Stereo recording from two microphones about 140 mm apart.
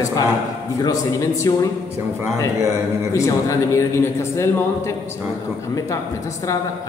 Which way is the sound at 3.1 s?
20° left (ahead or behind).